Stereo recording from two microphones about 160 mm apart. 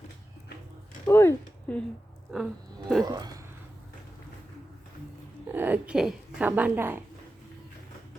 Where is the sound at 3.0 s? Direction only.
25° right (ahead or behind).